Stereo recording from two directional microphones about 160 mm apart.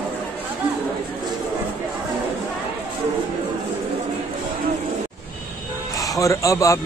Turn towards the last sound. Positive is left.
turn(degrees=20)  # may be behind; listen again after turning